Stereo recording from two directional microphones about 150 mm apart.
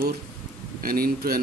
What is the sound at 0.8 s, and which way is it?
Speech, 75° right (ahead or behind).